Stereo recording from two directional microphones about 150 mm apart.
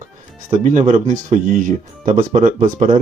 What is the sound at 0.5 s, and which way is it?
Speech, 55° right (ahead or behind).